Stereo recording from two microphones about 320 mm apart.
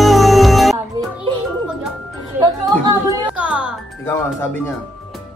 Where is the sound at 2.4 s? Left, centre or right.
Centre.